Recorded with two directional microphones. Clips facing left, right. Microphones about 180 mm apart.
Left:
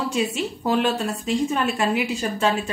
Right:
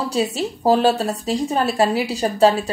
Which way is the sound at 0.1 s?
35° right (ahead or behind).